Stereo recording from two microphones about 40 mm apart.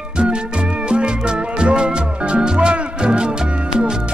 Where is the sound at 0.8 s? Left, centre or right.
Right.